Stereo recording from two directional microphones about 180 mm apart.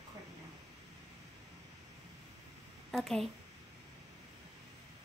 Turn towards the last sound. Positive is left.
turn(degrees=0)  # may be behind; listen again after turning